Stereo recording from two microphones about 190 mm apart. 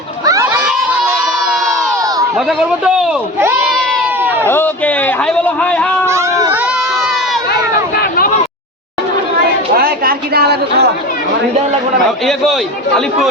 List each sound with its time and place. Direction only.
0.3 s a sound: 20° right (ahead or behind)
2.5 s a man's voice: 5° right (ahead or behind)
6.1 s speech: 15° right (ahead or behind)
7.9 s a sound: 50° left (ahead or behind)
9.7 s a woman's voice: 50° right (ahead or behind)
12.2 s a man's voice: centre (ahead or behind)